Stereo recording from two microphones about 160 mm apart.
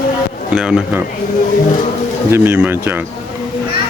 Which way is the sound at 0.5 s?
5° right (ahead or behind).